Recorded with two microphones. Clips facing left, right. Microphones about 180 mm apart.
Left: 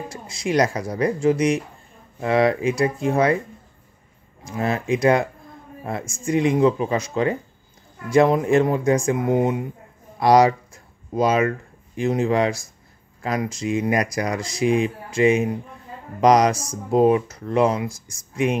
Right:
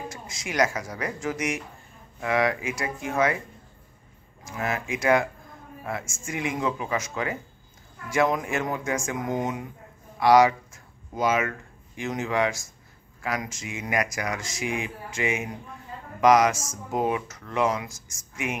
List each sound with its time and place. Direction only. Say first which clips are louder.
0.1 s speech: left 11 dB; 35° left (ahead or behind)
4.5 s speech: left 7 dB; 30° left (ahead or behind)
10.1 s a sound: left 3 dB; 35° left (ahead or behind)
12.0 s speech: left 6 dB; 35° left (ahead or behind)